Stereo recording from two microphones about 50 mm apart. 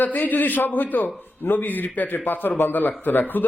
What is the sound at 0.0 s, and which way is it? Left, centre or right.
A man's voice, left.